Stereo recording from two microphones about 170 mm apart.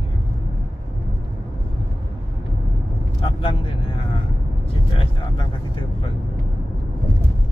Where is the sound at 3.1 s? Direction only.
30° left (ahead or behind).